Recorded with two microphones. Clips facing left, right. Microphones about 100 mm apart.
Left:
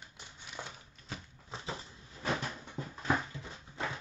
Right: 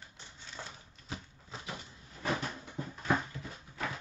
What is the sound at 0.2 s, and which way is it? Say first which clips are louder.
Typewriter: left 1 dB; 15° left (ahead or behind).